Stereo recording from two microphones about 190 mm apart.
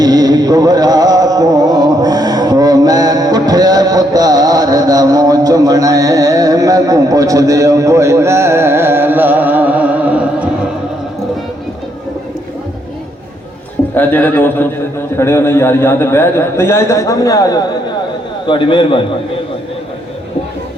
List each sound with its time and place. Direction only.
0.0 s music: 20° right (ahead or behind)
13.9 s a man's voice: 10° left (ahead or behind); by 19.0 s 25° left (ahead or behind)